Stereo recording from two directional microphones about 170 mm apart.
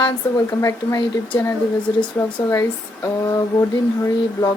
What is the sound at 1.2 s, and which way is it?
Speech, 10° left (ahead or behind).